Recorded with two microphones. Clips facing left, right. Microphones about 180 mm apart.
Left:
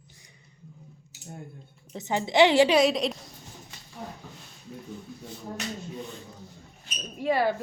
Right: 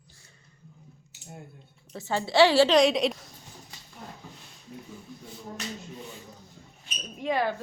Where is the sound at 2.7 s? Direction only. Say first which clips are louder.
Right 1 dB; centre (ahead or behind).